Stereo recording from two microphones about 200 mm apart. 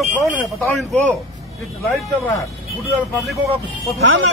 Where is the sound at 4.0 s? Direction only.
65° right (ahead or behind).